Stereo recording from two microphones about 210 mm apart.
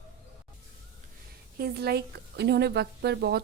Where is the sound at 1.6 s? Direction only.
50° right (ahead or behind).